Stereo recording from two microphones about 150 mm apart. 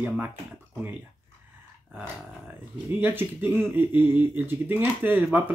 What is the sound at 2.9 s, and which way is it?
Speech, 15° right (ahead or behind).